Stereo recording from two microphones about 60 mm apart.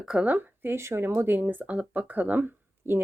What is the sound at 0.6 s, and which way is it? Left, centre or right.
Speech, right.